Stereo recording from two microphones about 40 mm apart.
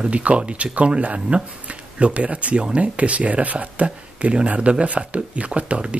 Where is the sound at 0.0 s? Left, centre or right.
Right.